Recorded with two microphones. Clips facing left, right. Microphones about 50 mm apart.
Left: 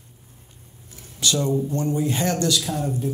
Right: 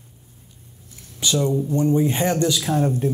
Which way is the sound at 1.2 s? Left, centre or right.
Centre.